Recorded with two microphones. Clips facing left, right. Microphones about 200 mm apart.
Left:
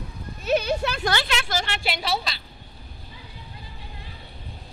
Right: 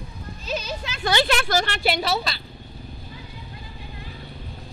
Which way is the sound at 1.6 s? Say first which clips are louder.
Right 5 dB; 45° right (ahead or behind).